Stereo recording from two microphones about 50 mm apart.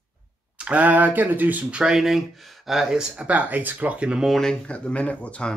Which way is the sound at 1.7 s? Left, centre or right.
Centre.